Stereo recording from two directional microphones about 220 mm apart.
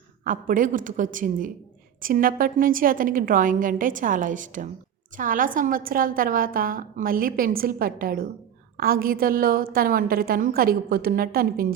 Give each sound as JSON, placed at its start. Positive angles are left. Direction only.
{"t": 0.3, "sound": "a woman's voice", "side_deg": -40}